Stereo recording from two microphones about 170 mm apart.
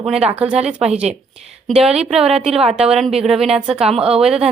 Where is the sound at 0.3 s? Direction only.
5° right (ahead or behind).